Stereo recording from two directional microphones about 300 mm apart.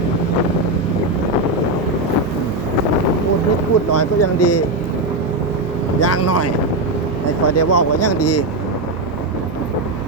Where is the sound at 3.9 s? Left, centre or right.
Left.